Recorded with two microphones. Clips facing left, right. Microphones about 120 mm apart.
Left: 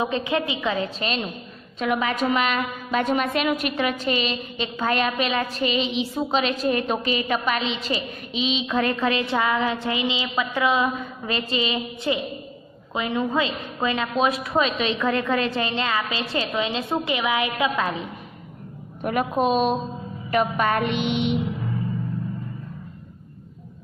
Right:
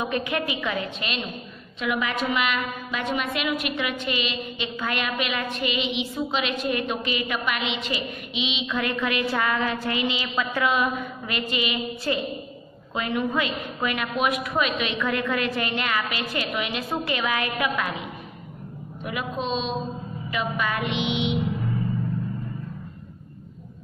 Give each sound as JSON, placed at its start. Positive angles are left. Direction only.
{"t": 0.0, "sound": "a woman's voice", "side_deg": 25}
{"t": 19.0, "sound": "music", "side_deg": 50}